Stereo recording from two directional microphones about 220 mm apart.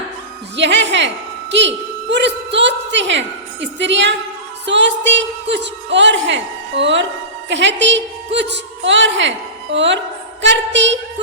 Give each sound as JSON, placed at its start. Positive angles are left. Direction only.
{"t": 0.5, "sound": "a woman's voice", "side_deg": -55}